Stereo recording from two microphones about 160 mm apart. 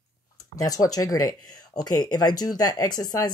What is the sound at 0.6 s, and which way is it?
Speech, 20° left (ahead or behind).